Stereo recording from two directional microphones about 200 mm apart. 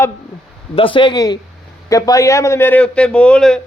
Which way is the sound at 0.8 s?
25° left (ahead or behind).